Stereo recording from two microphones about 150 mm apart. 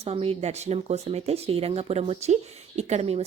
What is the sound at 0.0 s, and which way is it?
Speech, 40° right (ahead or behind).